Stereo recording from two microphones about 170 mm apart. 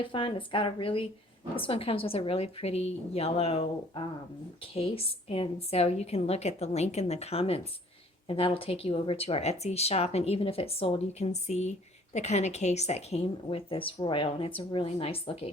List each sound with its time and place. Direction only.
0.0 s speech: 30° left (ahead or behind)
4.7 s speech: 35° left (ahead or behind)